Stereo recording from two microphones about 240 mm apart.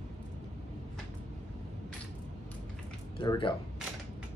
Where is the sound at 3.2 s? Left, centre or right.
Left.